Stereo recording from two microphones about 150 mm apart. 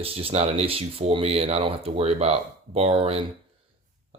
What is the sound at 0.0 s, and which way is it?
Speech, 40° right (ahead or behind).